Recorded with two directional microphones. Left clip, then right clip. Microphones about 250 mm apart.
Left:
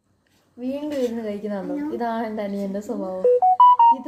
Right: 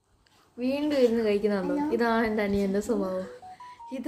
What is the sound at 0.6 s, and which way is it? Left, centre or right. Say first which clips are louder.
A woman's voice: right 1 dB; centre.